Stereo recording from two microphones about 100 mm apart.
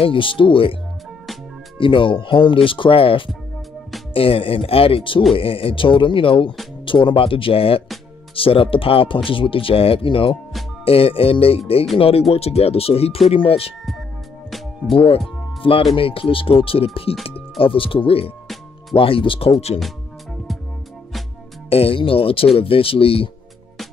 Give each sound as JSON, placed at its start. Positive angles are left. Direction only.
{"t": 0.0, "sound": "speech", "side_deg": 60}
{"t": 1.8, "sound": "speech", "side_deg": 60}
{"t": 12.0, "sound": "speech", "side_deg": 85}
{"t": 14.9, "sound": "speech", "side_deg": 70}
{"t": 17.6, "sound": "speech", "side_deg": 60}
{"t": 21.6, "sound": "speech", "side_deg": 75}